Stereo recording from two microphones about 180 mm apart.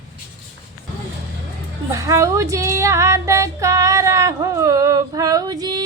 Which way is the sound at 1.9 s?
20° right (ahead or behind).